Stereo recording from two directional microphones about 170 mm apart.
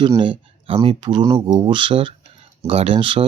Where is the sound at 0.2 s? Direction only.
30° right (ahead or behind).